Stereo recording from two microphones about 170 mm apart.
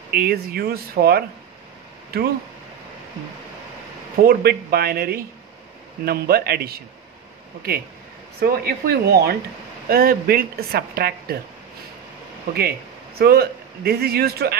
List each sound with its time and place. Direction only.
0.1 s a woman's voice: 60° right (ahead or behind)
4.2 s a woman's voice: 65° right (ahead or behind)
8.4 s a woman's voice: 65° right (ahead or behind)
13.2 s speech: 65° right (ahead or behind)